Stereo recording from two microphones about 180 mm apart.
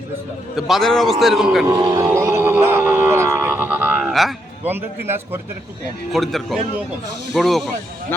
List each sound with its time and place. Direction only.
0.5 s speech: centre (ahead or behind)
1.6 s speech: 25° right (ahead or behind)
2.0 s a sound: 15° right (ahead or behind)
4.6 s a man's voice: 10° right (ahead or behind)
6.1 s speech: centre (ahead or behind)